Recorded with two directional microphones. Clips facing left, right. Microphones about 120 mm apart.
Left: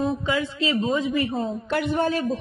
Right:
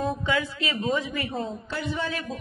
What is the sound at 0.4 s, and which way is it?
Speech, 20° left (ahead or behind).